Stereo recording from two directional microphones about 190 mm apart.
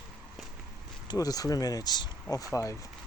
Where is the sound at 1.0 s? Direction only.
20° left (ahead or behind).